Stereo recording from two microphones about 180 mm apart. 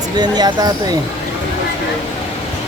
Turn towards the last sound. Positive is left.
turn(degrees=-25)  # may be behind; listen again after turning